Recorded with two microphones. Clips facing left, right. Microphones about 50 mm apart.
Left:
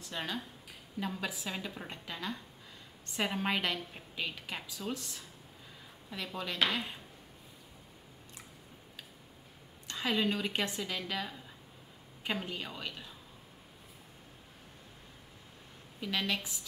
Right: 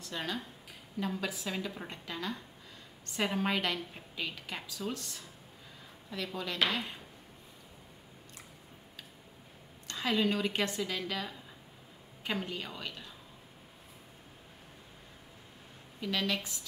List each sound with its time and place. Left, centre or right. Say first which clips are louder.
0.1 s speech: right 1 dB; centre
6.1 s speech: right 1 dB; centre
9.8 s speech: right 1 dB; centre
16.0 s speech: right 1 dB; centre